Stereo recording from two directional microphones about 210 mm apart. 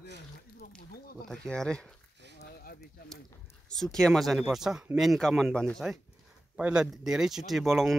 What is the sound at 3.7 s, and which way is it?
Speech, centre (ahead or behind).